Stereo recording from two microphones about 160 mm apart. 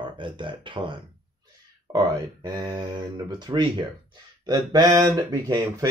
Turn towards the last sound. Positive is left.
turn(degrees=-25)  # may be behind; listen again after turning